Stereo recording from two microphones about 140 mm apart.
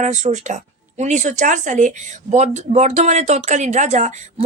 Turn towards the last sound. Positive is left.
turn(degrees=-55)  # may be behind; listen again after turning